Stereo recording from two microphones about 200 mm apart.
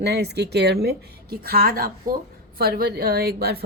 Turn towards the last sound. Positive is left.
turn(degrees=-50)  # may be behind; listen again after turning